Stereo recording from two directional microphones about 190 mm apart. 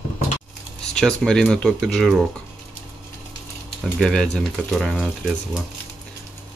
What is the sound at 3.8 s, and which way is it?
Speech, 5° left (ahead or behind).